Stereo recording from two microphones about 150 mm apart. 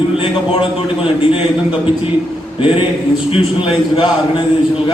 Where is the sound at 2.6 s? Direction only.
35° left (ahead or behind).